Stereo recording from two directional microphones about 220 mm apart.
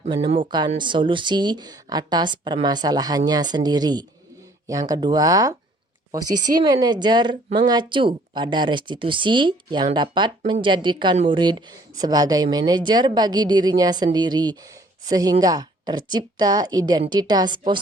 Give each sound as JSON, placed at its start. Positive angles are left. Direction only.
{"t": 0.0, "sound": "a woman's voice", "side_deg": -25}